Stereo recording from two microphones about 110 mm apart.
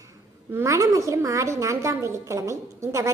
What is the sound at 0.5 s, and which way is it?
A woman's voice, 30° right (ahead or behind).